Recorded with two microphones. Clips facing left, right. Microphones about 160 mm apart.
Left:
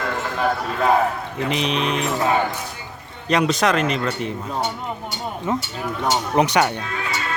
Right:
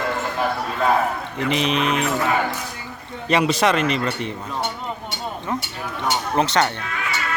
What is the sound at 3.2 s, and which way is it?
Speech, 5° right (ahead or behind).